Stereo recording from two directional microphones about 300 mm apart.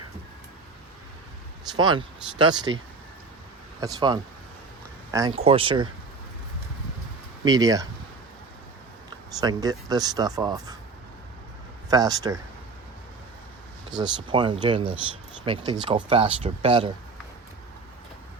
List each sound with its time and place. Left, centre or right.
1.7 s speech: centre
2.7 s speech: right
3.8 s speech: centre
7.4 s speech: centre
9.0 s speech: centre
11.9 s speech: centre
14.0 s speech: centre